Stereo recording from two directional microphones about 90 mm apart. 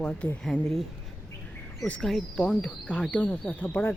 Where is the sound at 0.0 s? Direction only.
10° left (ahead or behind).